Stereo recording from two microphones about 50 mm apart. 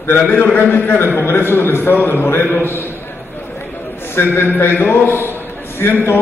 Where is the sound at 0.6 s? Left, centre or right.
Left.